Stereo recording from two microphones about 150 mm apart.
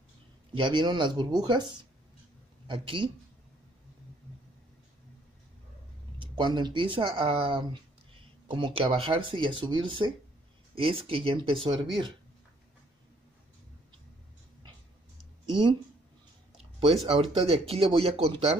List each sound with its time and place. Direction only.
0.6 s speech: 35° right (ahead or behind)
6.1 s speech: 30° right (ahead or behind)
16.5 s speech: 40° right (ahead or behind)